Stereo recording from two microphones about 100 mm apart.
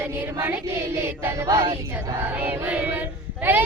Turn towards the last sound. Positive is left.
turn(degrees=-20)  # may be behind; listen again after turning